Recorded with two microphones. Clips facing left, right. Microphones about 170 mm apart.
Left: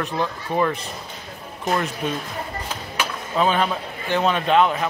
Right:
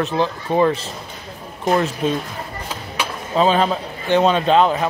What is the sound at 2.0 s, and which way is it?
Speech, 30° right (ahead or behind).